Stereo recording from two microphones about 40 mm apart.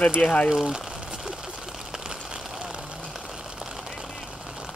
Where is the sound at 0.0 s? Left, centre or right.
Left.